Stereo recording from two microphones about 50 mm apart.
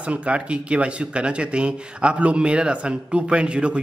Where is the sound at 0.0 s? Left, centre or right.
Right.